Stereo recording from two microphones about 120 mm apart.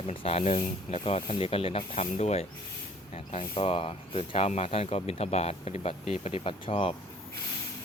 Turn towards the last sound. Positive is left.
turn(degrees=50)  # may be behind; listen again after turning